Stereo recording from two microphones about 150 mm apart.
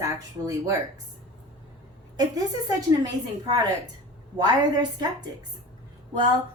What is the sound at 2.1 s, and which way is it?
Speech, 25° right (ahead or behind).